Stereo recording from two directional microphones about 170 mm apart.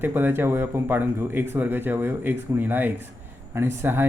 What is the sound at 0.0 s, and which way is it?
Speech, 10° right (ahead or behind).